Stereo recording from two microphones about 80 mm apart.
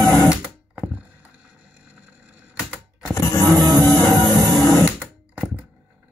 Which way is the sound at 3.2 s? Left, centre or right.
Left.